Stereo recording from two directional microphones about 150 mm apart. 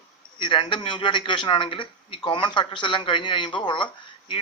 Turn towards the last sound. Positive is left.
turn(degrees=35)  # may be behind; listen again after turning